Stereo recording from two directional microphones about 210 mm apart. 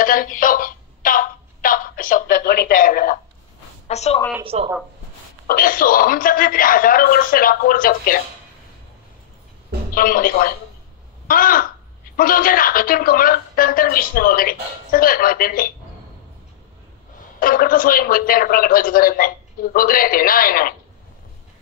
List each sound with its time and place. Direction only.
0.0 s a sound: 40° left (ahead or behind)
3.8 s a woman's voice: 30° left (ahead or behind)
4.5 s speech: 30° right (ahead or behind)
5.5 s a woman's voice: 40° left (ahead or behind)
9.9 s a woman's voice: 40° left (ahead or behind)
11.2 s crow: 40° left (ahead or behind)
12.2 s a woman's voice: 40° left (ahead or behind)
17.4 s a woman's voice: 40° left (ahead or behind)